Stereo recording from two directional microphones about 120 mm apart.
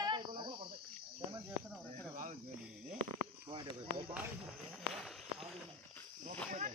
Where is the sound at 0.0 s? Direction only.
40° right (ahead or behind).